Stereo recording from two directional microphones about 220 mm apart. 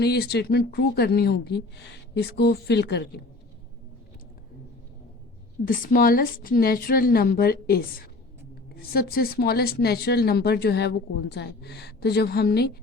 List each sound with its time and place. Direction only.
0.0 s speech: 45° left (ahead or behind)
5.6 s a woman's voice: 40° left (ahead or behind)